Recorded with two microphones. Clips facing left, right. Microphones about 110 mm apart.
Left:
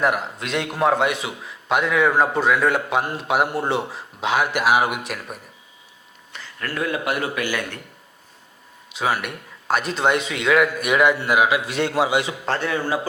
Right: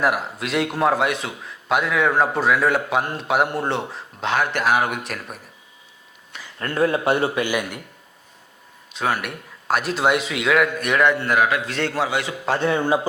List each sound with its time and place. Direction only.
0.0 s a man's voice: 5° right (ahead or behind)
6.6 s speech: 30° right (ahead or behind)
8.9 s a man's voice: 5° left (ahead or behind)
12.6 s speech: 25° right (ahead or behind)